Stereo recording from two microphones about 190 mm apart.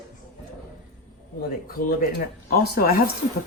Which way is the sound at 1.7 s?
50° left (ahead or behind).